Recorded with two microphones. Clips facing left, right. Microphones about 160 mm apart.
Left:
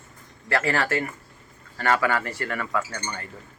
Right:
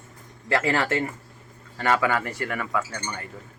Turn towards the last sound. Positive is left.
turn(degrees=-5)  # may be behind; listen again after turning